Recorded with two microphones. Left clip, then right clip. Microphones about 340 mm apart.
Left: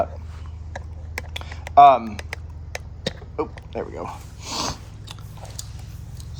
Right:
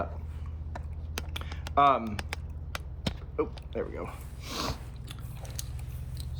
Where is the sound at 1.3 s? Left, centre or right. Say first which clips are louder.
Left 13 dB; centre.